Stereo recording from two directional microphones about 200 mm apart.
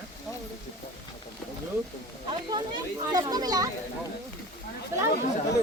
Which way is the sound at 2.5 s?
20° right (ahead or behind).